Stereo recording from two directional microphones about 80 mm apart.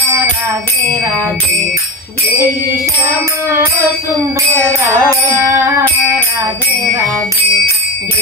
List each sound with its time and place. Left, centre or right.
4.6 s music: left
5.5 s music: right